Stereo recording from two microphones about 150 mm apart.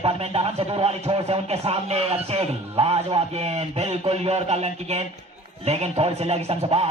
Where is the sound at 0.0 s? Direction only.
40° right (ahead or behind).